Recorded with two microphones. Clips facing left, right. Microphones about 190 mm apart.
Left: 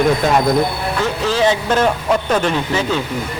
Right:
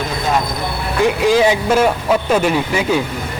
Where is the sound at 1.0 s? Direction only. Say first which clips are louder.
Right 4 dB; 15° right (ahead or behind).